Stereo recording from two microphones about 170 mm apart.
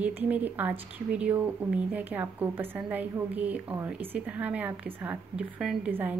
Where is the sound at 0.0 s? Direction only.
10° right (ahead or behind).